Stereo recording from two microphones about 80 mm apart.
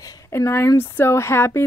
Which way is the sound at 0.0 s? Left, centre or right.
Left.